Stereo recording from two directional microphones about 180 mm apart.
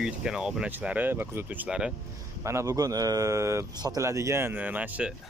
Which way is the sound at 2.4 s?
15° right (ahead or behind).